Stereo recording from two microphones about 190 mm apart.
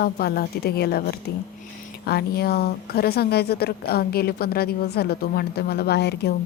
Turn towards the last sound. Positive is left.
turn(degrees=60)  # may be behind; listen again after turning